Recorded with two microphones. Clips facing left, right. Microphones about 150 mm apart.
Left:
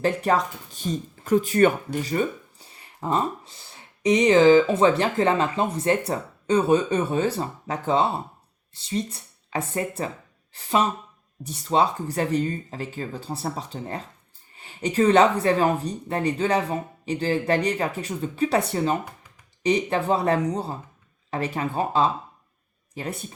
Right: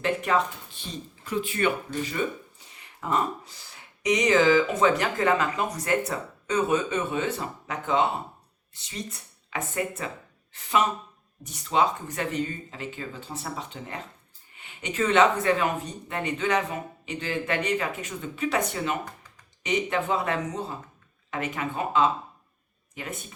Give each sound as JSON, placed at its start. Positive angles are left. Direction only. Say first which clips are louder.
{"t": 0.0, "sound": "speech", "louder": "left 3 dB", "side_deg": 35}